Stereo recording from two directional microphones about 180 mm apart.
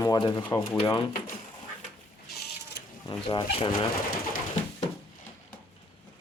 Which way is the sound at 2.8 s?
70° left (ahead or behind).